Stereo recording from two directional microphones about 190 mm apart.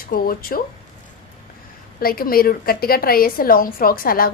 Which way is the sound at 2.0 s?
50° left (ahead or behind).